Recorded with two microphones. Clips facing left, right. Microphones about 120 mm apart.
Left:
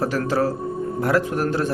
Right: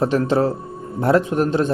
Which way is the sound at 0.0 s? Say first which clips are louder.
Right 4 dB; 25° right (ahead or behind).